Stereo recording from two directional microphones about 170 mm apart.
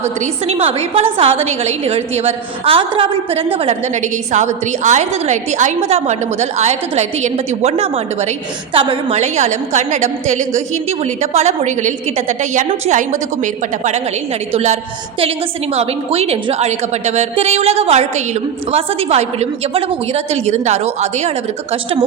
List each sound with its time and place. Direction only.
0.2 s a woman's voice: 35° right (ahead or behind)